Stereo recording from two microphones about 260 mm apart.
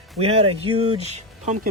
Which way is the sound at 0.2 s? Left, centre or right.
Right.